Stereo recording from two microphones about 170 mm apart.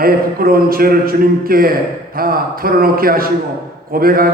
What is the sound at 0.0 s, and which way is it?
Speech, 60° right (ahead or behind).